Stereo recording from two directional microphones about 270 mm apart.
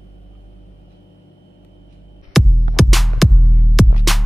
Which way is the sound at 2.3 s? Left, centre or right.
Centre.